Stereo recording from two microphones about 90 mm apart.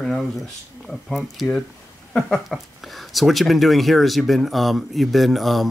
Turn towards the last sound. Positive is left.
turn(degrees=0)  # may be behind; listen again after turning